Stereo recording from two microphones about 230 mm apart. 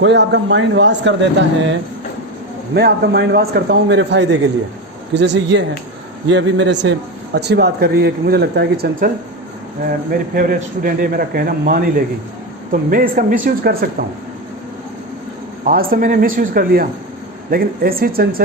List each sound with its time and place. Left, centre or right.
0.0 s speech: right
2.7 s speech: right
10.3 s a man's voice: right
15.6 s a man's voice: right